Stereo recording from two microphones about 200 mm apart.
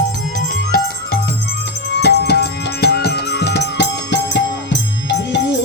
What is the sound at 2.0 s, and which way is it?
Music, 55° left (ahead or behind).